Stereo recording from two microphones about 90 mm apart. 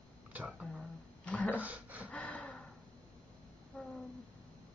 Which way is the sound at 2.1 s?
15° left (ahead or behind).